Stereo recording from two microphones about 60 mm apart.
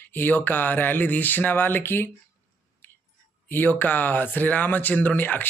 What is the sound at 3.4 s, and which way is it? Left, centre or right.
A man's voice, left.